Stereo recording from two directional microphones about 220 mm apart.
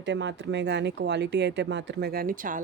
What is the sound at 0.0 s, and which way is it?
Speech, 55° right (ahead or behind).